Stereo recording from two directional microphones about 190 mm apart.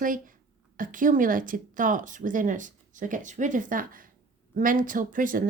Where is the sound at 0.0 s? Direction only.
45° right (ahead or behind).